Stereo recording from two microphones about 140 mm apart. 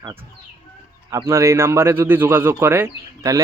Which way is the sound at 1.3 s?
20° right (ahead or behind).